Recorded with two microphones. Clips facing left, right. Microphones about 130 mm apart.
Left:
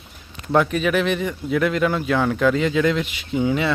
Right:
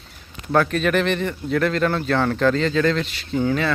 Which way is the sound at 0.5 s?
10° left (ahead or behind).